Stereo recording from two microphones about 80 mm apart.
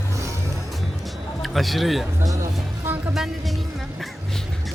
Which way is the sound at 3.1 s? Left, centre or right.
Centre.